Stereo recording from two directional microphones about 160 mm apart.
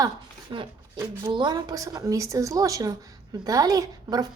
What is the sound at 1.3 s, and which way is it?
A woman's voice, 25° right (ahead or behind).